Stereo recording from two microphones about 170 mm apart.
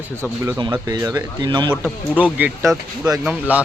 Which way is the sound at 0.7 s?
20° right (ahead or behind).